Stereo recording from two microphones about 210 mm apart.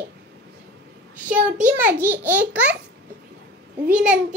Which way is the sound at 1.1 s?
5° right (ahead or behind).